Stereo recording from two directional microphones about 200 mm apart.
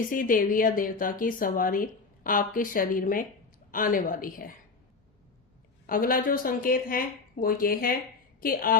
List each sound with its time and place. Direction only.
0.1 s a woman's voice: 45° left (ahead or behind)
5.8 s a woman's voice: 45° left (ahead or behind)